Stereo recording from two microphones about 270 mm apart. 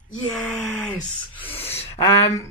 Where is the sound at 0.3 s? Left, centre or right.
Centre.